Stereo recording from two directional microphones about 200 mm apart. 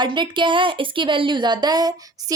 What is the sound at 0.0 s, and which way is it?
A woman's voice, 25° right (ahead or behind).